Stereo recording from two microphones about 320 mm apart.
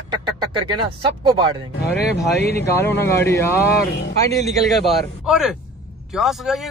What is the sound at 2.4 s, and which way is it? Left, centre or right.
Speech, left.